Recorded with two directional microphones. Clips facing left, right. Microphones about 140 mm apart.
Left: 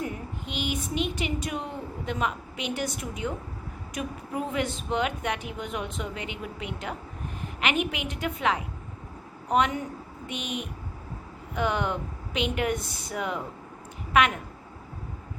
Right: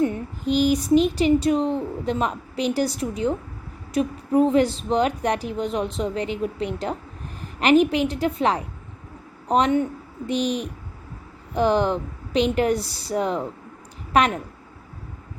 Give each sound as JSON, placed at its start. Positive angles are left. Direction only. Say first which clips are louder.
{"t": 0.0, "sound": "a woman's voice", "louder": "right 10 dB", "side_deg": -35}